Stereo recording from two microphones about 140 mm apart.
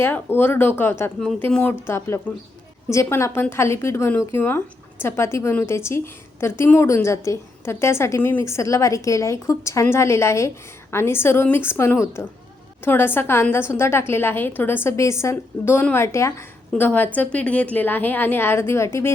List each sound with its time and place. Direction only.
0.0 s a woman's voice: 15° left (ahead or behind)